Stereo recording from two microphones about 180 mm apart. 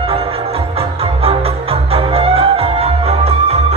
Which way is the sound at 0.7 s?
35° right (ahead or behind).